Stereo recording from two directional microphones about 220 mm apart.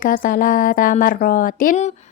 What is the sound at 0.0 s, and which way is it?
Speech, 40° left (ahead or behind).